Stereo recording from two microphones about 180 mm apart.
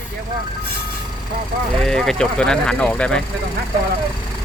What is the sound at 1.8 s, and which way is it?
Speech, 5° left (ahead or behind).